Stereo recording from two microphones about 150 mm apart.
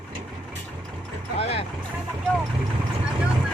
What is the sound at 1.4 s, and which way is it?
Music, 40° left (ahead or behind).